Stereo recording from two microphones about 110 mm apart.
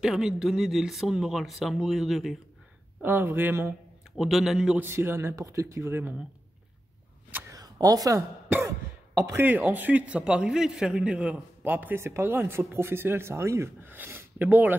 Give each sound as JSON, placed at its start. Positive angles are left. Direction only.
{"t": 0.0, "sound": "speech", "side_deg": -5}
{"t": 3.0, "sound": "speech", "side_deg": -20}
{"t": 4.2, "sound": "speech", "side_deg": 0}
{"t": 4.8, "sound": "speech", "side_deg": -20}
{"t": 7.4, "sound": "a sound", "side_deg": -35}
{"t": 9.2, "sound": "a man's voice", "side_deg": -20}